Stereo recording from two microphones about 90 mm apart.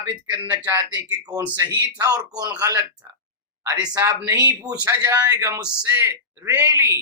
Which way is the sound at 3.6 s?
35° right (ahead or behind).